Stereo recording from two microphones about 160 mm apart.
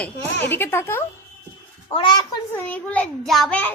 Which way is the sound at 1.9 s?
30° left (ahead or behind).